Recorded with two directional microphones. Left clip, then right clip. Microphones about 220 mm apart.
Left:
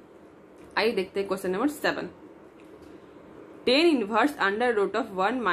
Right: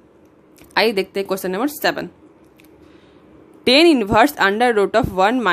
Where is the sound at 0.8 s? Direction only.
50° right (ahead or behind).